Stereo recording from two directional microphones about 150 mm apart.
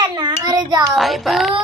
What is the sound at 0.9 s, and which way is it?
Speech, centre (ahead or behind).